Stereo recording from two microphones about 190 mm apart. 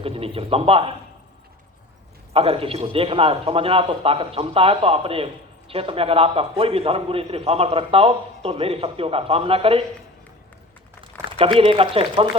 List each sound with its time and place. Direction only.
0.0 s a man's voice: 30° right (ahead or behind)
2.3 s a man's voice: 30° right (ahead or behind)
11.3 s speech: 30° right (ahead or behind)